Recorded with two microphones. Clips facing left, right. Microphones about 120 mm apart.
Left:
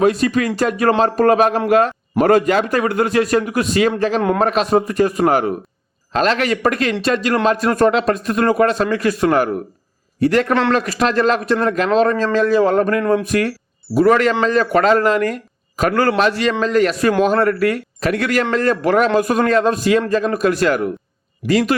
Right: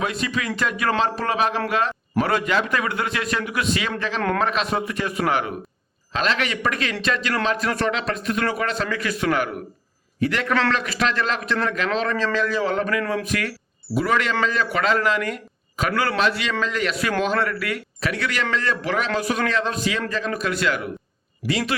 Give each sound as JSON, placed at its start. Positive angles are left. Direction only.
{"t": 0.0, "sound": "a man's voice", "side_deg": 40}